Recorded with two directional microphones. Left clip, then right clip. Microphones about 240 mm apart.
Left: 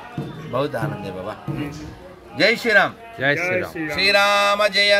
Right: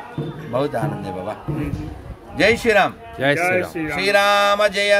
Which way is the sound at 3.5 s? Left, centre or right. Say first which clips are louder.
Right 2 dB; right.